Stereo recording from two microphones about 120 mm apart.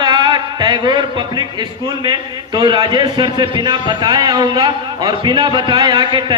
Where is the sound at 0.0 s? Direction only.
35° right (ahead or behind).